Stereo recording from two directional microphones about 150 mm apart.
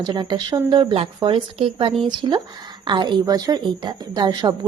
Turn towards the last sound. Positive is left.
turn(degrees=-30)  # may be behind; listen again after turning